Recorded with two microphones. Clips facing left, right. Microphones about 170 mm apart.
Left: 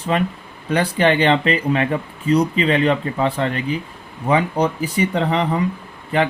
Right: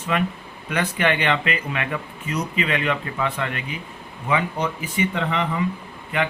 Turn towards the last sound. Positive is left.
turn(degrees=35)  # may be behind; listen again after turning